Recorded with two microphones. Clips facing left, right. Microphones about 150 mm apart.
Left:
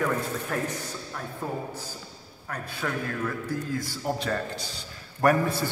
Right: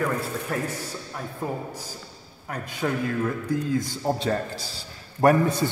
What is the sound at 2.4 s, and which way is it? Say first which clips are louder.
A man's voice: right 4 dB; 20° right (ahead or behind).